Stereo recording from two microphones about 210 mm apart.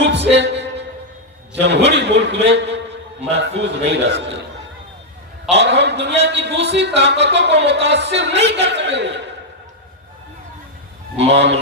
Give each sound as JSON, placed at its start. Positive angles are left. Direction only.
{"t": 0.0, "sound": "a sound", "side_deg": -55}
{"t": 1.6, "sound": "a man's voice", "side_deg": -55}
{"t": 5.5, "sound": "a man's voice", "side_deg": -55}
{"t": 11.2, "sound": "a man's voice", "side_deg": -55}